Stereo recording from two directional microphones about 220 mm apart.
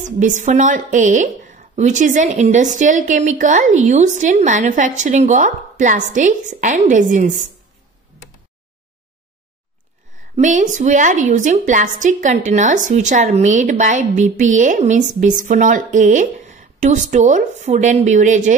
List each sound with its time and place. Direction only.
0.0 s a woman's voice: 35° right (ahead or behind)
10.3 s a woman's voice: 35° right (ahead or behind)